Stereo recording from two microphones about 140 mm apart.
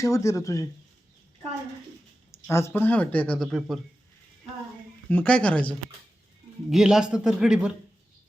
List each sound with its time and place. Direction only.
0.0 s speech: 20° left (ahead or behind)
2.3 s speech: 20° left (ahead or behind); by 3.8 s centre (ahead or behind)
5.0 s speech: 10° left (ahead or behind)
6.7 s a man's voice: 5° right (ahead or behind)